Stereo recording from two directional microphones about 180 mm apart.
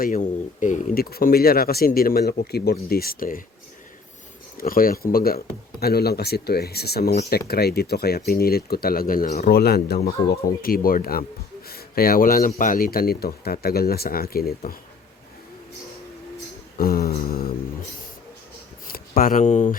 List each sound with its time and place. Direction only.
0.0 s speech: 45° left (ahead or behind)
4.5 s speech: 55° left (ahead or behind)
16.7 s speech: 55° left (ahead or behind)
18.9 s speech: 55° left (ahead or behind)